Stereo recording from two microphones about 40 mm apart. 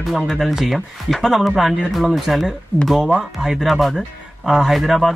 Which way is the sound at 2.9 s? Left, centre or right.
Centre.